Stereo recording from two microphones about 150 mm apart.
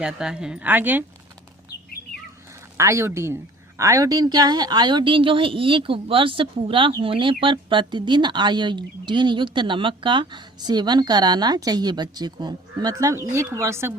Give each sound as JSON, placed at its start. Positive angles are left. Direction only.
{"t": 0.0, "sound": "speech", "side_deg": -5}
{"t": 2.7, "sound": "a woman's voice", "side_deg": -20}